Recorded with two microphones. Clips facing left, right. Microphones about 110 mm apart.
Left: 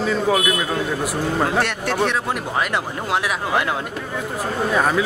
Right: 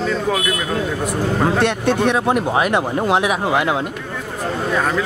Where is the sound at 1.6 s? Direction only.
20° right (ahead or behind).